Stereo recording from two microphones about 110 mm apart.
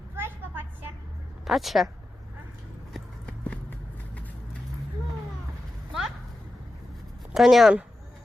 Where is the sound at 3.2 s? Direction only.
15° left (ahead or behind).